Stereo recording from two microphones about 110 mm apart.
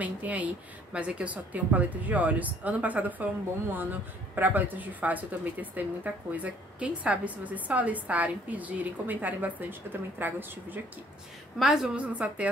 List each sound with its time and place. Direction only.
0.0 s speech: 15° right (ahead or behind)
11.5 s speech: 5° right (ahead or behind)